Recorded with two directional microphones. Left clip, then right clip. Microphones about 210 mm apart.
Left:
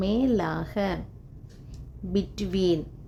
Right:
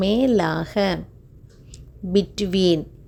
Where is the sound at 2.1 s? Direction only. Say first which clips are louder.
Right 8 dB; 35° right (ahead or behind).